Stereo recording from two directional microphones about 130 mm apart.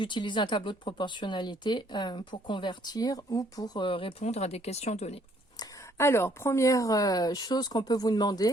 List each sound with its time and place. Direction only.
0.0 s speech: 40° left (ahead or behind)
4.2 s speech: 55° left (ahead or behind)
6.0 s speech: 20° left (ahead or behind)